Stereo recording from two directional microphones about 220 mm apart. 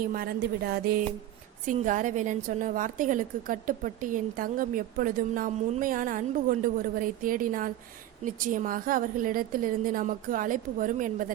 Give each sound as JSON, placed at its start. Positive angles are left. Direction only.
{"t": 0.0, "sound": "a woman's voice", "side_deg": -40}